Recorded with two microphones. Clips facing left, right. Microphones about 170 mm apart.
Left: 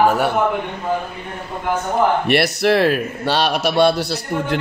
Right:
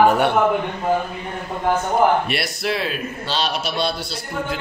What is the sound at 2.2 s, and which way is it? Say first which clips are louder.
A man's voice: left 8 dB; 65° left (ahead or behind).